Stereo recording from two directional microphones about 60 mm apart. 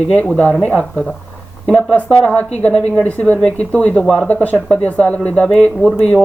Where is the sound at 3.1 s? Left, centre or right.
Left.